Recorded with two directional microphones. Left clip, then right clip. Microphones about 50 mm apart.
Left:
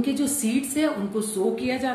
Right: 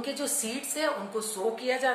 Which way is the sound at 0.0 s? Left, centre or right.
Right.